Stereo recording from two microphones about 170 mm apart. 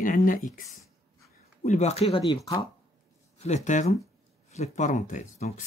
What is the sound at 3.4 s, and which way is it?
Speech, 40° left (ahead or behind).